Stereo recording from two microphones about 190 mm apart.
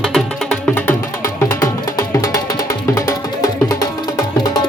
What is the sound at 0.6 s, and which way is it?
Music, 10° left (ahead or behind).